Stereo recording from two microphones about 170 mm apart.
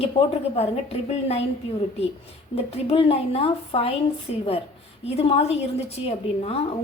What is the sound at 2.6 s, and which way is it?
A woman's voice, 35° left (ahead or behind).